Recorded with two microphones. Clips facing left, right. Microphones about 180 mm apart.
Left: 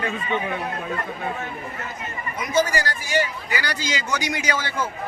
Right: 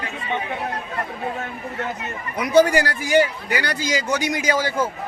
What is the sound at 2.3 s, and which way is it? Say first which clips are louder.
Speech: right 7 dB; 70° right (ahead or behind).